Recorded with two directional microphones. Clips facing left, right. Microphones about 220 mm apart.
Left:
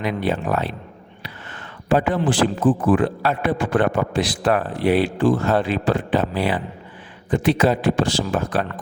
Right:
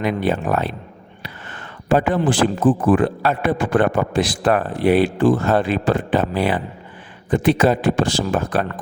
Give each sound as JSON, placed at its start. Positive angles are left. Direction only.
{"t": 0.0, "sound": "a man's voice", "side_deg": -50}
{"t": 1.9, "sound": "a man's voice", "side_deg": -50}